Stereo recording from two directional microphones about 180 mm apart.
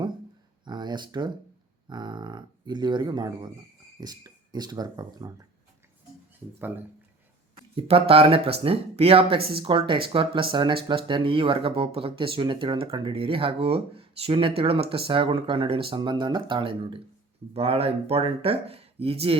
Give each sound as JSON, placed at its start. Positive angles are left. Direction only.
{"t": 0.6, "sound": "speech", "side_deg": -25}
{"t": 6.6, "sound": "speech", "side_deg": -10}
{"t": 7.8, "sound": "speech", "side_deg": -30}